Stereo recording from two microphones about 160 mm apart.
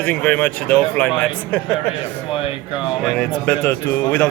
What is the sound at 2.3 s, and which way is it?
Speech, 35° left (ahead or behind).